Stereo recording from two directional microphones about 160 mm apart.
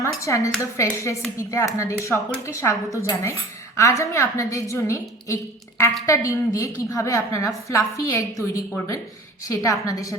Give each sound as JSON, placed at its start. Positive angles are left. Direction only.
{"t": 0.0, "sound": "a woman's voice", "side_deg": 20}
{"t": 9.4, "sound": "a woman's voice", "side_deg": 20}